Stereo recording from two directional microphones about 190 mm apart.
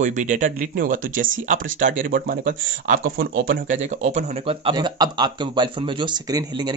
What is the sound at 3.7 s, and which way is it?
Speech, 40° right (ahead or behind).